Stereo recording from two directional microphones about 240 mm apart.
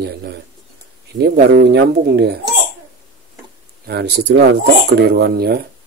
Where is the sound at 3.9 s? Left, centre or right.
Right.